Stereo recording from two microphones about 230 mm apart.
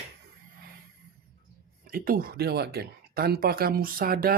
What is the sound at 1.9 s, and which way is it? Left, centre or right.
Speech, right.